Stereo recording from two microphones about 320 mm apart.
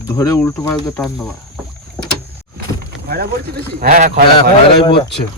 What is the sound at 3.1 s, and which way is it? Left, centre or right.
Speech, right.